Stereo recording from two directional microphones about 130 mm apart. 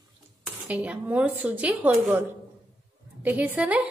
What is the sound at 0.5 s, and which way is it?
A woman's voice, 10° right (ahead or behind).